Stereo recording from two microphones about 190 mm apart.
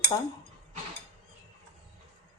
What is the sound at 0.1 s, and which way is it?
Speech, 25° left (ahead or behind).